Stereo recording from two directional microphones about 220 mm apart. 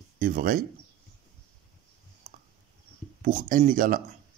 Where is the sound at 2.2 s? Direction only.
35° right (ahead or behind).